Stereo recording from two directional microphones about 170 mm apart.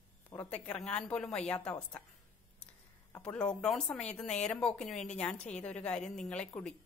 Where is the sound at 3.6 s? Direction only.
5° left (ahead or behind).